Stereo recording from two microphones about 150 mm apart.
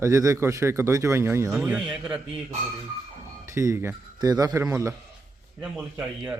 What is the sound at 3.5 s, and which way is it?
Speech, 20° right (ahead or behind).